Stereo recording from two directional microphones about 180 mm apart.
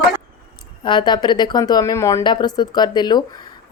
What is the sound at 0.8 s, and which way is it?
Speech, 25° left (ahead or behind).